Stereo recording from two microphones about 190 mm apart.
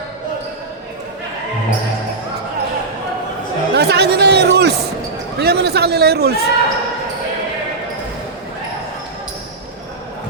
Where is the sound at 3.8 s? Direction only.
60° right (ahead or behind).